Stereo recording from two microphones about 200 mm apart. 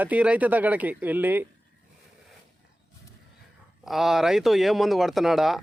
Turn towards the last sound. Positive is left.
turn(degrees=0)  # may be behind; listen again after turning